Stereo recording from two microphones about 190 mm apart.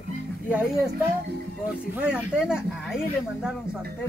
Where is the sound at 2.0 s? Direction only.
5° right (ahead or behind).